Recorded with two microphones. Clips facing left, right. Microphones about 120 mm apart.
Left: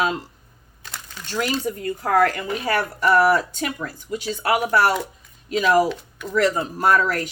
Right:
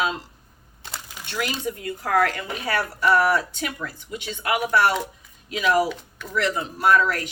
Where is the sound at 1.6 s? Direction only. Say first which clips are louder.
Left 3 dB; 40° left (ahead or behind).